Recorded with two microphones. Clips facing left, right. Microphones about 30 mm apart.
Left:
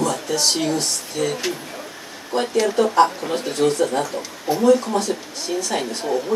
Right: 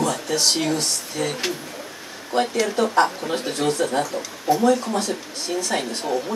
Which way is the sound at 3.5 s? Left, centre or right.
Right.